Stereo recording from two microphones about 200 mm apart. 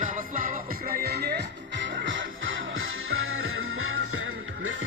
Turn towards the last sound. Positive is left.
turn(degrees=-90)